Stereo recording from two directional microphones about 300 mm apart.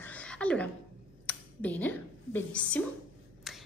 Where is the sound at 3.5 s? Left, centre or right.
Centre.